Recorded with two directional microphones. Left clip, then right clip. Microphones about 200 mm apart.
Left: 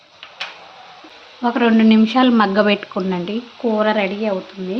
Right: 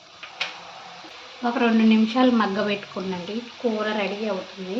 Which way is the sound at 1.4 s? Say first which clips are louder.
Left 6 dB; 60° left (ahead or behind).